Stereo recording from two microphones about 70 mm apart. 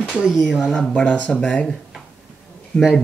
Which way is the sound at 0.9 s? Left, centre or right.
Left.